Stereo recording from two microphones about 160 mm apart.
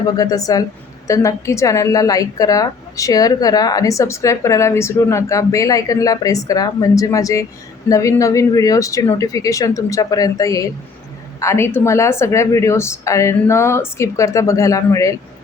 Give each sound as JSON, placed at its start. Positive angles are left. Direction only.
{"t": 0.1, "sound": "a woman's voice", "side_deg": 20}